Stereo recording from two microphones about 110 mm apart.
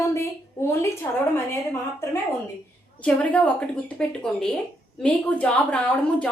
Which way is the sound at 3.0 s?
15° left (ahead or behind).